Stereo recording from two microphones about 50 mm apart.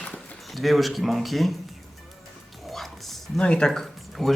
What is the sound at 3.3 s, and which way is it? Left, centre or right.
Speech, centre.